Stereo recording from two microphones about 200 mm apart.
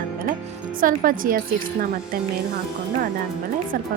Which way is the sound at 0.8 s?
45° right (ahead or behind).